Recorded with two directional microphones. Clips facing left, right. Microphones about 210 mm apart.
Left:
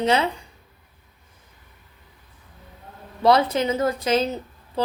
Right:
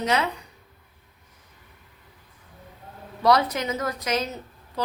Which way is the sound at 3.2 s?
25° left (ahead or behind).